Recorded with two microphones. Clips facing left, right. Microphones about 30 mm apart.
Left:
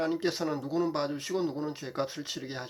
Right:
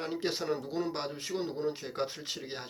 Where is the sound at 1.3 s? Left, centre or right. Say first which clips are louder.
Even; right.